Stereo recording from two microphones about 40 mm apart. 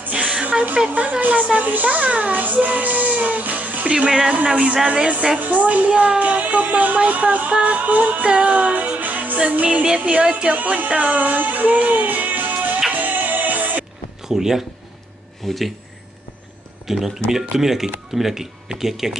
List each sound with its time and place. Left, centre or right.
0.4 s music: right
0.8 s a child's voice: right
3.9 s speech: centre
4.8 s a child's voice: right
5.4 s a child's voice: right
8.3 s music: right
9.4 s a child's voice: right
10.5 s music: right
14.2 s speech: centre
15.4 s speech: centre
16.8 s speech: centre